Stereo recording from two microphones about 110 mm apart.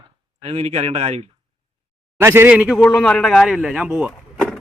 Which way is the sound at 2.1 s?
20° right (ahead or behind).